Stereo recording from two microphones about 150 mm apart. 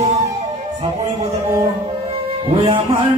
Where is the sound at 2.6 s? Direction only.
35° right (ahead or behind).